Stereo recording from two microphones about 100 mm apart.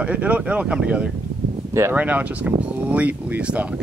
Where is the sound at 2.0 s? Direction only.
15° right (ahead or behind).